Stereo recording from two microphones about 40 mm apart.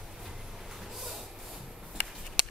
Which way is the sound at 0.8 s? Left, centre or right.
Centre.